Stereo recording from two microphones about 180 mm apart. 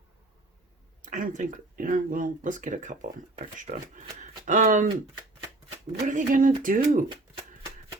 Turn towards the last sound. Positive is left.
turn(degrees=-25)  # may be behind; listen again after turning